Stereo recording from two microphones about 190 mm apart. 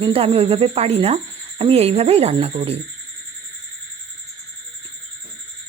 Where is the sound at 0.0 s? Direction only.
30° right (ahead or behind).